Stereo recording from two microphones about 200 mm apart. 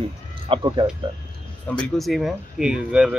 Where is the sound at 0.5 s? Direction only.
25° right (ahead or behind).